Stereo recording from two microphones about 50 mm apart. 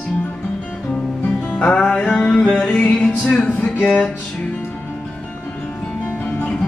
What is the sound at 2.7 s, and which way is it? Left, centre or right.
Music, left.